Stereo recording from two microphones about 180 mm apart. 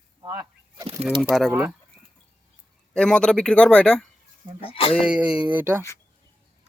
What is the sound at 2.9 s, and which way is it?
Speech, 5° left (ahead or behind).